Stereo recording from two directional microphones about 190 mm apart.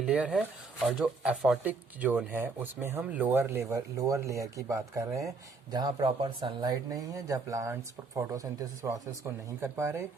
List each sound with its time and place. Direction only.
0.0 s speech: 5° right (ahead or behind)